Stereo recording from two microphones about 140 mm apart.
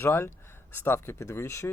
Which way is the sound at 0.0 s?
15° left (ahead or behind).